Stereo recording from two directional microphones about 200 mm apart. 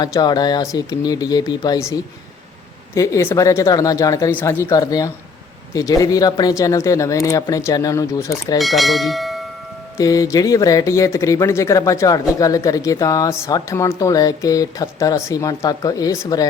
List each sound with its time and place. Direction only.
0.0 s speech: 20° left (ahead or behind)
8.5 s speech: centre (ahead or behind)
10.0 s speech: 15° left (ahead or behind)